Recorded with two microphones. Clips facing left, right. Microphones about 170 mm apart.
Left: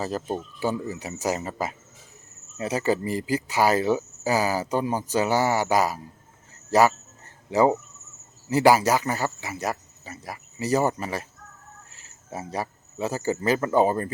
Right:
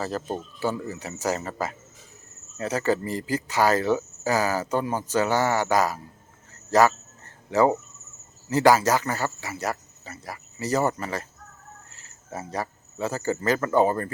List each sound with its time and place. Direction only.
0.0 s speech: 15° left (ahead or behind)